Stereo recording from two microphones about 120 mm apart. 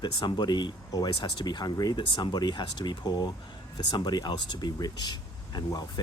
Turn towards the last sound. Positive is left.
turn(degrees=35)  # may be behind; listen again after turning